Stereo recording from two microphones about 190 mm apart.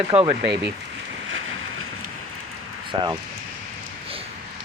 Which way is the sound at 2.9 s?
25° right (ahead or behind).